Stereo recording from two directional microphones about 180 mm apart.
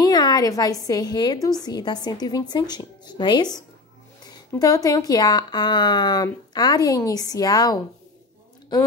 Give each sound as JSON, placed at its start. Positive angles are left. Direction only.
{"t": 0.0, "sound": "a woman's voice", "side_deg": 20}